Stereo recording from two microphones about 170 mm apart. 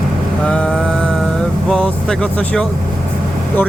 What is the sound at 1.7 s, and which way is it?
Speech, 5° left (ahead or behind).